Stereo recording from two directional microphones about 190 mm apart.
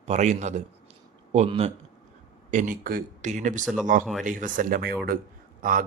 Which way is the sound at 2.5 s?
45° right (ahead or behind).